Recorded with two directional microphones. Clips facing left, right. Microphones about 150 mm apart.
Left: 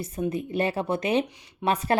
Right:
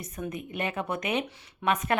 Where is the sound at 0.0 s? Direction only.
30° left (ahead or behind).